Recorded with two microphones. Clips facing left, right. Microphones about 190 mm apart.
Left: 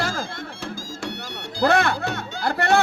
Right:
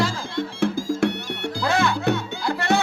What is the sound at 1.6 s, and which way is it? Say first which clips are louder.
Music: left 2 dB; 60° left (ahead or behind).